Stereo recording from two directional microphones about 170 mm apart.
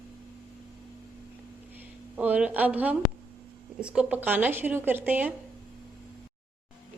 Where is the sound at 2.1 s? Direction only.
10° right (ahead or behind).